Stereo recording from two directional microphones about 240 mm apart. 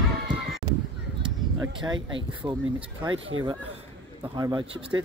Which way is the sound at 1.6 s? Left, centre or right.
Centre.